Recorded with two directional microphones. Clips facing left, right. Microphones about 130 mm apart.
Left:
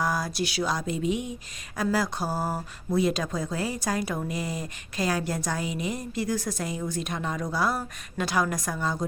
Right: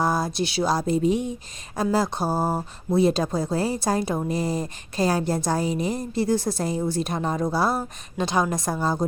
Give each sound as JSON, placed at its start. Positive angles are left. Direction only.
{"t": 0.0, "sound": "speech", "side_deg": -25}